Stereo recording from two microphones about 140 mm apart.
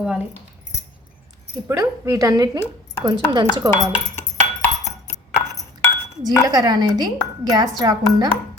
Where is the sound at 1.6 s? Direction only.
20° right (ahead or behind).